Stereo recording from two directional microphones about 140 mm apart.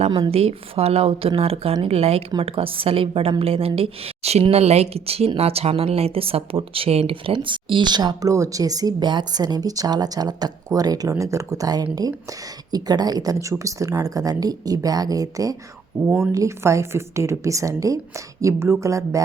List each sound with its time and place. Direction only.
0.1 s a woman's voice: 40° right (ahead or behind); by 19.2 s 20° right (ahead or behind)